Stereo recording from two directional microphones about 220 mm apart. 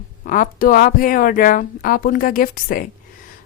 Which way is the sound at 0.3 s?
40° left (ahead or behind).